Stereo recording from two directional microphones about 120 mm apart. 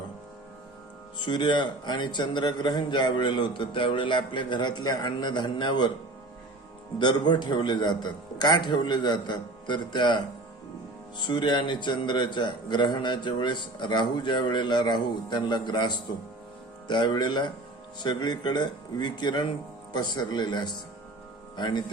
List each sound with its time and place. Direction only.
1.2 s a man's voice: 40° left (ahead or behind)
7.0 s a man's voice: 40° left (ahead or behind)
11.3 s a man's voice: 40° left (ahead or behind)